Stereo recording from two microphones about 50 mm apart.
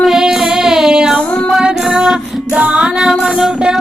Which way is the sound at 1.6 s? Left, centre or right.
Centre.